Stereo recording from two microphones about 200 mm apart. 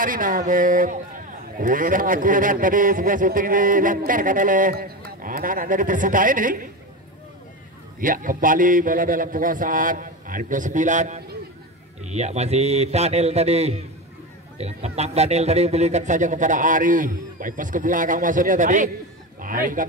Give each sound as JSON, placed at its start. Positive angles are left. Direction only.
{"t": 0.0, "sound": "a man's voice", "side_deg": -45}
{"t": 8.0, "sound": "a man's voice", "side_deg": -45}